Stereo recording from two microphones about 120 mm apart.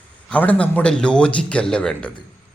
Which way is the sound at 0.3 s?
10° left (ahead or behind).